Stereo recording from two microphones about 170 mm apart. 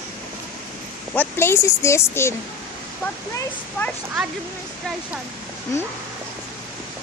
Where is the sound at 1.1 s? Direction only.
15° left (ahead or behind).